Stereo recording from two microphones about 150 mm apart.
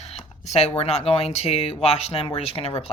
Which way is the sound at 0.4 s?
45° left (ahead or behind).